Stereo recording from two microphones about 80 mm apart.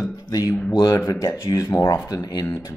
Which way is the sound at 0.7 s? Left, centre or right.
Left.